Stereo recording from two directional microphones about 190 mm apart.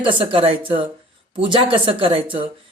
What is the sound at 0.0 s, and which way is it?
Speech, 25° right (ahead or behind).